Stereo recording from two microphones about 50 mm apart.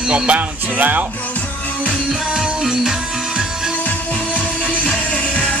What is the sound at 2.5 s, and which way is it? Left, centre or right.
Music, centre.